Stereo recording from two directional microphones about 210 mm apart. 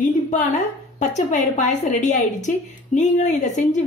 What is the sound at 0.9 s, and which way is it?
A woman's voice, 35° left (ahead or behind).